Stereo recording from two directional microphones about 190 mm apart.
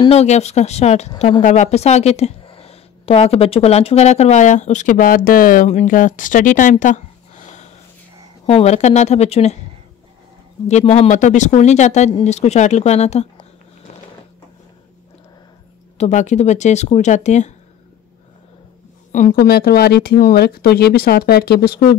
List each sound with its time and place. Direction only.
0.0 s a woman's voice: 35° left (ahead or behind)
8.5 s a woman's voice: 35° left (ahead or behind)
10.7 s a woman's voice: 35° left (ahead or behind)
16.0 s a woman's voice: 40° left (ahead or behind)
19.3 s speech: 55° left (ahead or behind)